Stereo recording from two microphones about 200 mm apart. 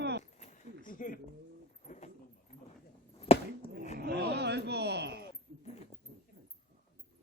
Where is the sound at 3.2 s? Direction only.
30° left (ahead or behind).